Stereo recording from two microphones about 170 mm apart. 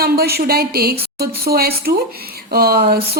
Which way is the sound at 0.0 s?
65° right (ahead or behind).